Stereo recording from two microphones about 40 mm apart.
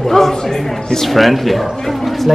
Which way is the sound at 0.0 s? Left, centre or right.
Centre.